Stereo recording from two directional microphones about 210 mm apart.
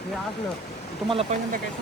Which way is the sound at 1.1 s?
30° right (ahead or behind).